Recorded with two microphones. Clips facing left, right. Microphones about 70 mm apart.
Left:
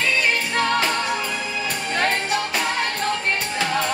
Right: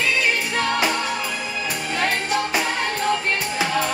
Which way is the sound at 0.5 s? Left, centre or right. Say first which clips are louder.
Left 2 dB; centre.